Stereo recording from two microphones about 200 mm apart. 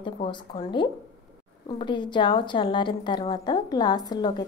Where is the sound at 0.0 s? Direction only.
25° left (ahead or behind).